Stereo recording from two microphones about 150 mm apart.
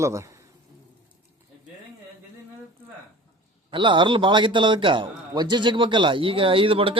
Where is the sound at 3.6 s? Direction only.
35° right (ahead or behind).